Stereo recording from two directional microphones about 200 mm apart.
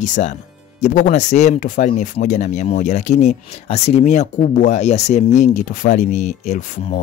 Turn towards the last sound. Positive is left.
turn(degrees=35)  # may be behind; listen again after turning